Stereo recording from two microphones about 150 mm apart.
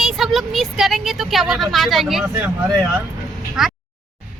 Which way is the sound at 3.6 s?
Centre (ahead or behind).